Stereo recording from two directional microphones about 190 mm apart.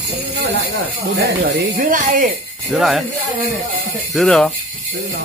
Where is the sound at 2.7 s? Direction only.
Centre (ahead or behind).